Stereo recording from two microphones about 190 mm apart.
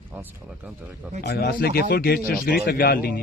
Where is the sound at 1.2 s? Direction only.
60° left (ahead or behind).